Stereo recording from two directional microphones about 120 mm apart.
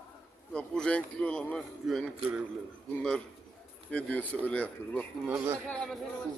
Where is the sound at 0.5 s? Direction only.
10° left (ahead or behind).